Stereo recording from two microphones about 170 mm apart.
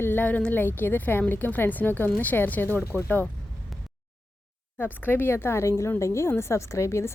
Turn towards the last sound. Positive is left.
turn(degrees=15)  # may be behind; listen again after turning